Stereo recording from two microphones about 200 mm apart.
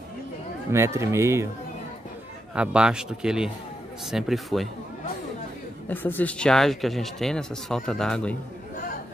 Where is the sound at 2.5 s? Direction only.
5° right (ahead or behind).